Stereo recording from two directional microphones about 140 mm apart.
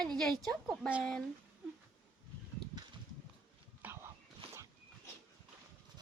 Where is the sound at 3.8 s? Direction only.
10° right (ahead or behind).